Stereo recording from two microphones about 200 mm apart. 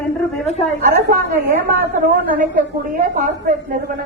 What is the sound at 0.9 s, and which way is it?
Speech, 50° right (ahead or behind).